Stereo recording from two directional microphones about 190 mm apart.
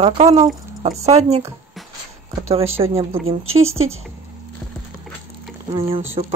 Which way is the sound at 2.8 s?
25° right (ahead or behind).